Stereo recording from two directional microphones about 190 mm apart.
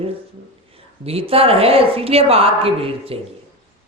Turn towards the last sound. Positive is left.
turn(degrees=-30)  # may be behind; listen again after turning